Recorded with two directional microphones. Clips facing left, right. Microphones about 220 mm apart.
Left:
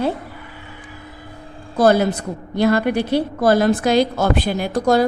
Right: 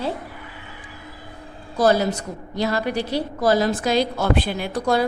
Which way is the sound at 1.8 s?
55° left (ahead or behind).